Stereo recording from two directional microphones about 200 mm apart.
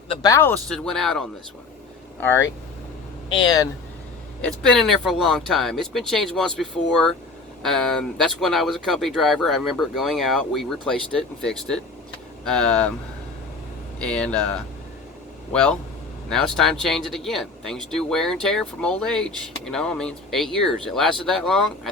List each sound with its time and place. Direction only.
0.1 s speech: 20° left (ahead or behind); by 1.2 s centre (ahead or behind)
3.2 s speech: 25° left (ahead or behind)
4.4 s speech: 5° left (ahead or behind)
14.0 s speech: 5° left (ahead or behind)
16.3 s speech: centre (ahead or behind)